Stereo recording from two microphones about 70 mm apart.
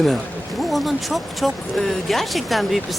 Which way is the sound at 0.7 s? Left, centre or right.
Centre.